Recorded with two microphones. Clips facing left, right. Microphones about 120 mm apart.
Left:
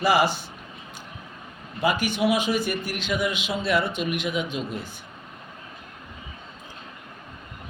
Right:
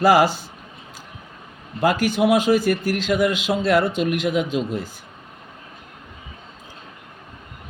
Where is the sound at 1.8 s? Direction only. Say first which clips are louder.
Right 5 dB; 90° right.